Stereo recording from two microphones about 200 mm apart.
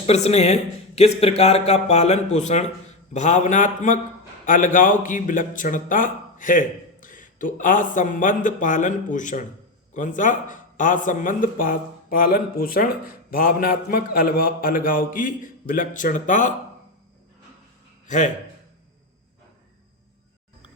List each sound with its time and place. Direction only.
0.0 s a man's voice: 30° left (ahead or behind)